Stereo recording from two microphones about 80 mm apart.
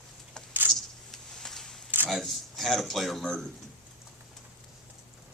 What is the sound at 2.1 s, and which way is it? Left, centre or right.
Speech, centre.